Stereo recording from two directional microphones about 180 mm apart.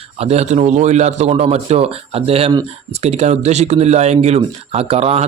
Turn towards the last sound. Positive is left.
turn(degrees=-35)  # may be behind; listen again after turning